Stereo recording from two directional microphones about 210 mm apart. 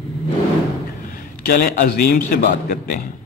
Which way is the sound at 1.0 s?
45° left (ahead or behind).